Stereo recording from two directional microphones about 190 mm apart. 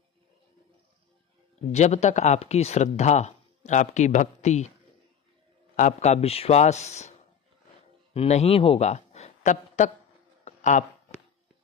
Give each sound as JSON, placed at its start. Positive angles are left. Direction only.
{"t": 1.7, "sound": "speech", "side_deg": 35}
{"t": 5.8, "sound": "a man's voice", "side_deg": 40}
{"t": 10.4, "sound": "a sound", "side_deg": 40}